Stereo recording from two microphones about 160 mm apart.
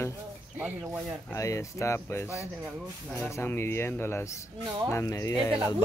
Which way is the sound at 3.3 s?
15° left (ahead or behind).